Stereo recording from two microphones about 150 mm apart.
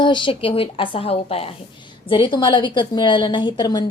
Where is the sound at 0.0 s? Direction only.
30° left (ahead or behind).